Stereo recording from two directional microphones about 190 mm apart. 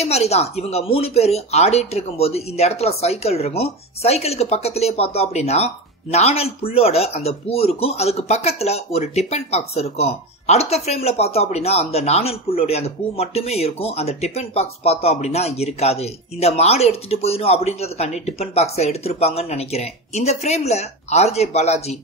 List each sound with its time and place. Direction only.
0.0 s speech: 35° left (ahead or behind)